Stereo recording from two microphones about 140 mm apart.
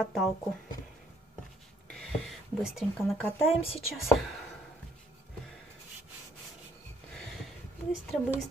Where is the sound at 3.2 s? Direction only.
15° left (ahead or behind).